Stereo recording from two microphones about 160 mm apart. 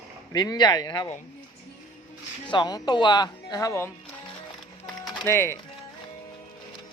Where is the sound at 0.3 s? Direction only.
25° left (ahead or behind).